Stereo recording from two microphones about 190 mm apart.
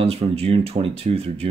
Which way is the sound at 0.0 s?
30° right (ahead or behind).